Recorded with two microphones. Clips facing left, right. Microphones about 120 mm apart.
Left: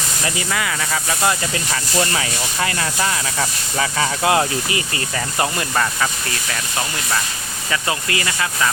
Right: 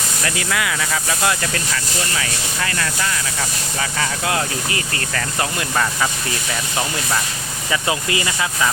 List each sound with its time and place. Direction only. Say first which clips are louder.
0.3 s speech: right 2 dB; centre (ahead or behind)
1.7 s speech: left 4 dB; 30° left (ahead or behind)
5.4 s speech: left 1 dB; centre (ahead or behind); by 8.4 s 20° right (ahead or behind)